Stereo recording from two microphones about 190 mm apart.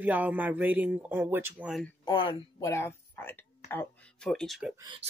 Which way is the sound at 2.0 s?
25° left (ahead or behind).